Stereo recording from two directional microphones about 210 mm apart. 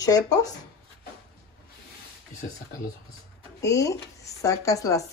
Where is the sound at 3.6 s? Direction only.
15° left (ahead or behind).